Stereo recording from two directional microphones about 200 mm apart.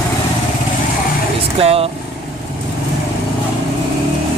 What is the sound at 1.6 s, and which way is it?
Speech, 30° right (ahead or behind).